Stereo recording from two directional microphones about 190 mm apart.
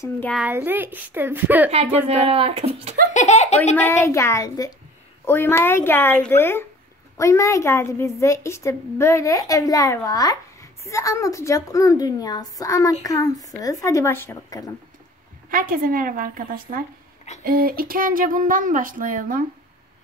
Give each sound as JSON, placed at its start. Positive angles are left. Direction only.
{"t": 0.3, "sound": "a child's voice", "side_deg": -5}
{"t": 1.7, "sound": "speech", "side_deg": -30}
{"t": 3.1, "sound": "speech", "side_deg": 40}
{"t": 3.7, "sound": "a woman's voice", "side_deg": 10}
{"t": 15.5, "sound": "speech", "side_deg": -50}